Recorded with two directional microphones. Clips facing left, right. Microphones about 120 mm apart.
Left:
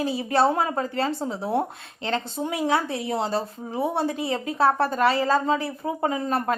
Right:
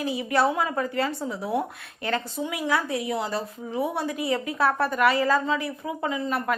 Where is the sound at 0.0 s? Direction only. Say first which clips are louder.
Left 2 dB; 30° left (ahead or behind).